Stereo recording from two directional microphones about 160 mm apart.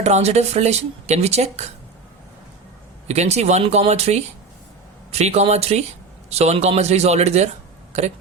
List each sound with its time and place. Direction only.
0.0 s speech: 45° right (ahead or behind)
3.1 s speech: 45° right (ahead or behind)